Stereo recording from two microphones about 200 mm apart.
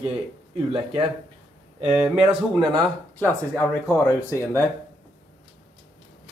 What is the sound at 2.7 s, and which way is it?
Speech, 10° left (ahead or behind).